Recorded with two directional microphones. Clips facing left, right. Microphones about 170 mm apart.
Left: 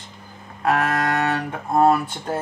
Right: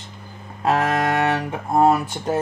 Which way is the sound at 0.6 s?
25° right (ahead or behind).